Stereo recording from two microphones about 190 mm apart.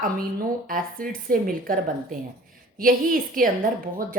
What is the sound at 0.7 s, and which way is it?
A woman's voice, 50° right (ahead or behind).